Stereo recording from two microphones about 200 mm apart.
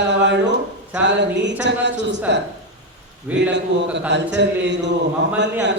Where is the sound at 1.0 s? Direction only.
60° right (ahead or behind).